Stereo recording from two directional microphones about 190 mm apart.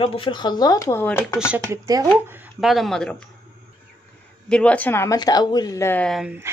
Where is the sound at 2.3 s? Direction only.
5° right (ahead or behind).